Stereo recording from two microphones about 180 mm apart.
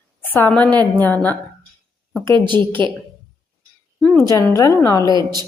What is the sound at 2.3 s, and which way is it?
Speech, 25° right (ahead or behind).